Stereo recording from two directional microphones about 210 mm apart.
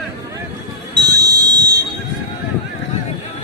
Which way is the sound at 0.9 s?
20° right (ahead or behind).